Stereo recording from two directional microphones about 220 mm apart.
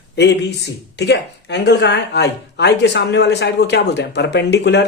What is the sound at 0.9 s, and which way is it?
Speech, 50° left (ahead or behind).